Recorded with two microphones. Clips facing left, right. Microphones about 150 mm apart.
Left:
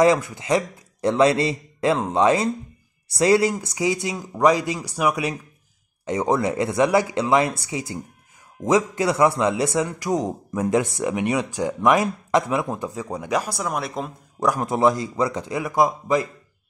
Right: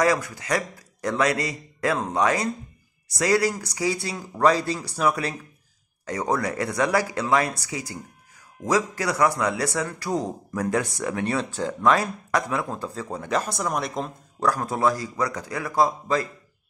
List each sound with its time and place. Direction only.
0.0 s a man's voice: 25° left (ahead or behind); by 14.1 s 5° left (ahead or behind)
14.4 s a man's voice: 20° left (ahead or behind)